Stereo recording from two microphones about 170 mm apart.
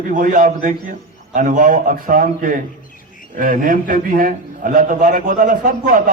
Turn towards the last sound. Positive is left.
turn(degrees=-55)  # may be behind; listen again after turning